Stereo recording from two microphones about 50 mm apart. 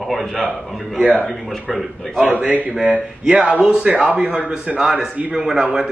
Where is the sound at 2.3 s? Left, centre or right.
Right.